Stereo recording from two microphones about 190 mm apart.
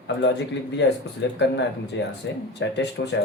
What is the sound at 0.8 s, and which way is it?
Speech, 65° left (ahead or behind).